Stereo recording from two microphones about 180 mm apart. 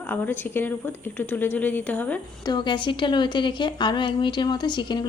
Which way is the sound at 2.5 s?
25° left (ahead or behind).